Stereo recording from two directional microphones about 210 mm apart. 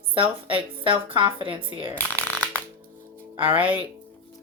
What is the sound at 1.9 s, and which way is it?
Shuffling cards, 10° left (ahead or behind).